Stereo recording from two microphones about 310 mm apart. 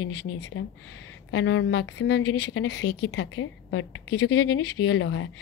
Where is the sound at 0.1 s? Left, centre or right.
Left.